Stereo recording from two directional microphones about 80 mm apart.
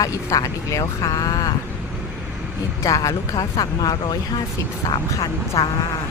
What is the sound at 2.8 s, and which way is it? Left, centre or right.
Speech, left.